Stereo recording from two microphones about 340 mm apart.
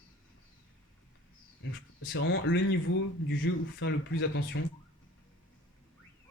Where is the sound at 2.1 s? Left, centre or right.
Left.